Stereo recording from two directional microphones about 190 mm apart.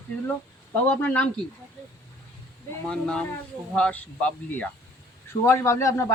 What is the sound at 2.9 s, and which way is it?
Speech, 5° left (ahead or behind).